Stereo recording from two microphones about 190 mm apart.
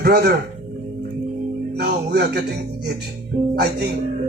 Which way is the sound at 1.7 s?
60° right (ahead or behind).